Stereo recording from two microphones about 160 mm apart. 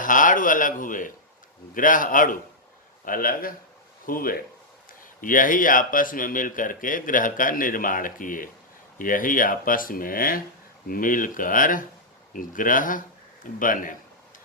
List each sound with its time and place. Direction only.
0.0 s speech: 55° left (ahead or behind)